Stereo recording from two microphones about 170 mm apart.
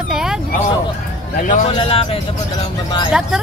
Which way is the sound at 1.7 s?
30° left (ahead or behind).